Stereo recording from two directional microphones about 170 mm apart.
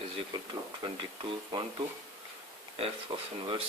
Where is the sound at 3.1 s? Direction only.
25° right (ahead or behind).